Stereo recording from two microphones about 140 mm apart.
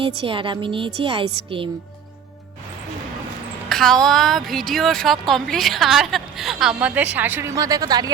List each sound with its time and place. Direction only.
0.0 s a woman's voice: 35° right (ahead or behind)
3.7 s a woman's voice: 5° left (ahead or behind); by 8.1 s 25° right (ahead or behind)